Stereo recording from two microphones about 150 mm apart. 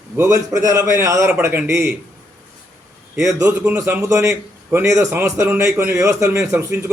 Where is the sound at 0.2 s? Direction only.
20° right (ahead or behind).